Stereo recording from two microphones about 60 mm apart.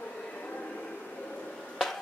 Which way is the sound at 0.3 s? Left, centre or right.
Left.